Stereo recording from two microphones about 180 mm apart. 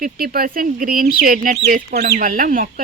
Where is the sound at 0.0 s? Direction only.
55° right (ahead or behind).